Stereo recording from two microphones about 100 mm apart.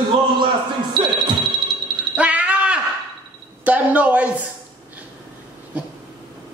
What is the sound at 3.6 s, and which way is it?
Speech, 15° right (ahead or behind).